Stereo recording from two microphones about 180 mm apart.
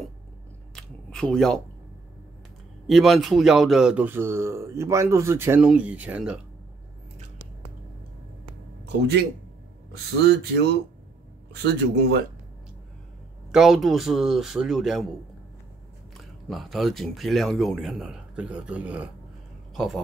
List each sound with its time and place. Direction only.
0.7 s a sound: 5° left (ahead or behind)
2.9 s speech: centre (ahead or behind)
8.8 s speech: 65° right (ahead or behind)
10.2 s a man's voice: 65° right (ahead or behind)
13.5 s a man's voice: centre (ahead or behind)
16.4 s a man's voice: centre (ahead or behind)